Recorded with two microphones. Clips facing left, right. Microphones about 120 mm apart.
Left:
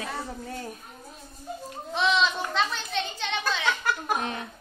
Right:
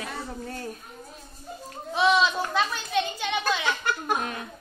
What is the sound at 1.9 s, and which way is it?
A woman's voice, 10° right (ahead or behind).